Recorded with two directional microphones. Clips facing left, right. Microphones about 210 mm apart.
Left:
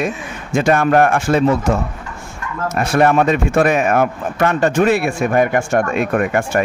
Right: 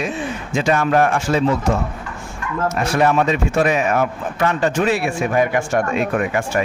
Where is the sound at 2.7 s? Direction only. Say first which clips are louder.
Left 4 dB; 55° left (ahead or behind).